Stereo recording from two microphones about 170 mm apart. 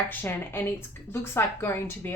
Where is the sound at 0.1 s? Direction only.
10° left (ahead or behind).